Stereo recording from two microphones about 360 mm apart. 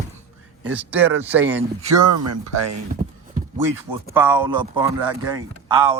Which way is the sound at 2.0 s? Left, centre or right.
Right.